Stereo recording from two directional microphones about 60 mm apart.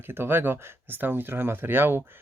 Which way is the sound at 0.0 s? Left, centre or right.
Right.